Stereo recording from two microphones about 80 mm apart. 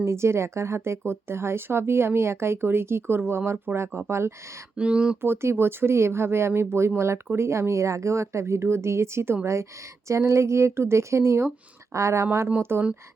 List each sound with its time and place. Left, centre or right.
0.0 s speech: right
4.8 s speech: centre
5.2 s speech: right